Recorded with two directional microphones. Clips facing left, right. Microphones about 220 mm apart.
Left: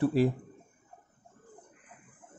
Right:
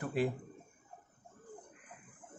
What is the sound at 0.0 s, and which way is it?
Speech, 35° left (ahead or behind).